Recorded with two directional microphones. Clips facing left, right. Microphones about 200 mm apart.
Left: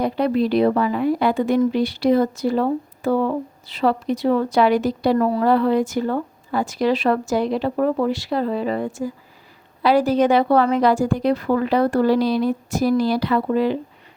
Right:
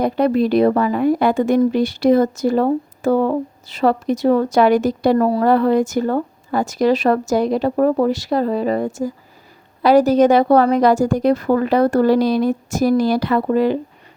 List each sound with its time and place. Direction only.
0.0 s speech: 45° right (ahead or behind)